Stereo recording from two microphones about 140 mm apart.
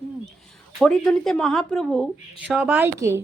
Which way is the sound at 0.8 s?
5° left (ahead or behind).